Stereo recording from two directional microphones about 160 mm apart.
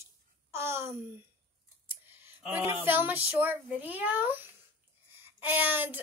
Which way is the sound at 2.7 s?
15° right (ahead or behind).